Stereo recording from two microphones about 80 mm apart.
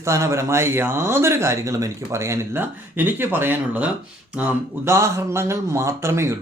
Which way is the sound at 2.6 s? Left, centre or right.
Right.